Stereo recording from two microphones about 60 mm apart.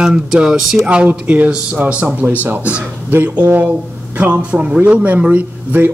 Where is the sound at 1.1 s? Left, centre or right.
Right.